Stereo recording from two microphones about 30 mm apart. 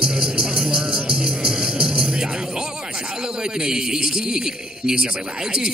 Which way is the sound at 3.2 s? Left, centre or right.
Right.